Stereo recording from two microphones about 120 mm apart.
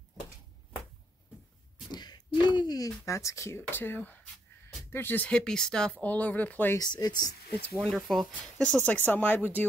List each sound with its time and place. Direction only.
1.9 s a sound: 35° left (ahead or behind)
2.4 s owl: 40° left (ahead or behind)
3.1 s speech: 25° left (ahead or behind)
6.8 s speech: 35° left (ahead or behind)
7.7 s speech: centre (ahead or behind)
8.7 s speech: 15° left (ahead or behind)